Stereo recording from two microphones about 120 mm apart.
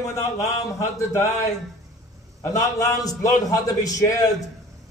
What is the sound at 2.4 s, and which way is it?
A man's voice, 30° left (ahead or behind).